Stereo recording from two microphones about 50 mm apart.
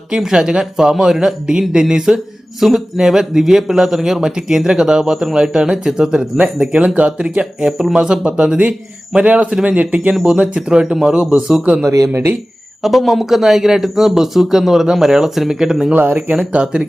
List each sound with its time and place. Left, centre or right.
0.1 s speech: centre
7.7 s speech: centre
7.9 s speech: centre
9.2 s speech: right
12.8 s speech: centre
15.9 s speech: right
16.3 s speech: right